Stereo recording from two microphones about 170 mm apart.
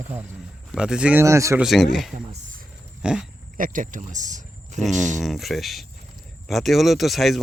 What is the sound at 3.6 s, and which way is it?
Speech, 50° right (ahead or behind).